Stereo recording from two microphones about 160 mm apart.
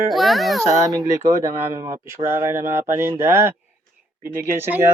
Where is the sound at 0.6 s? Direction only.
20° right (ahead or behind).